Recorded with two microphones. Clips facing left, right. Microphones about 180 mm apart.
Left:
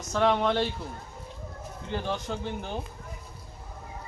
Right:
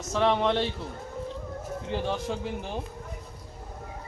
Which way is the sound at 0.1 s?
Centre (ahead or behind).